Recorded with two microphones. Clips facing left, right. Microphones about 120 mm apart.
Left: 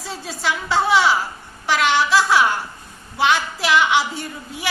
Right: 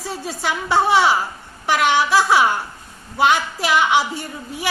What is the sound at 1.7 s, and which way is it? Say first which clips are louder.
A woman's voice: right 1 dB; 50° right (ahead or behind).